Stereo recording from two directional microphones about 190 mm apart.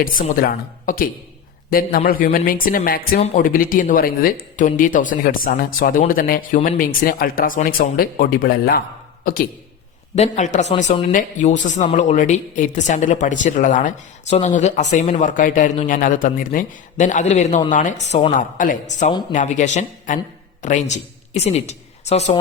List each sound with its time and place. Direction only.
0.0 s speech: 45° left (ahead or behind)
10.2 s a woman's voice: 40° left (ahead or behind)